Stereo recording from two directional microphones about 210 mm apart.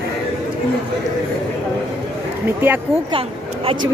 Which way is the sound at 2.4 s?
10° right (ahead or behind).